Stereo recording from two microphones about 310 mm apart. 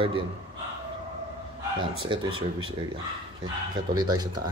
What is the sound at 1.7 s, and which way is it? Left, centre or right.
Speech, centre.